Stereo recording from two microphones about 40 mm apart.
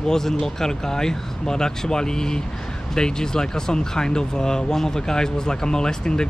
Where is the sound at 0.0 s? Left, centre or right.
Centre.